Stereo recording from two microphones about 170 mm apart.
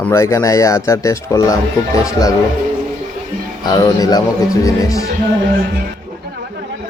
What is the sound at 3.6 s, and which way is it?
Speech, 20° left (ahead or behind).